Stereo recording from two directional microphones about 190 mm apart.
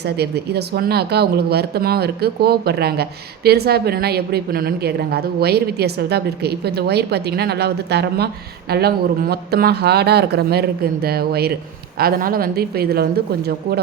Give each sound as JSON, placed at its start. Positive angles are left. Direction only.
{"t": 0.0, "sound": "speech", "side_deg": -60}